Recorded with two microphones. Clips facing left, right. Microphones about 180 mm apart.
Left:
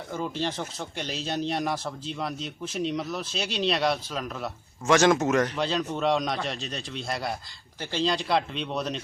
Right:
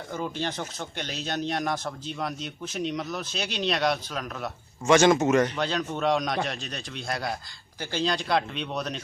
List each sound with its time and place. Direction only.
0.1 s speech: centre (ahead or behind)